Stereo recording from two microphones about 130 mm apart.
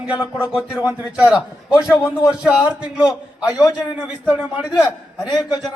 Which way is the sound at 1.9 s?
25° left (ahead or behind).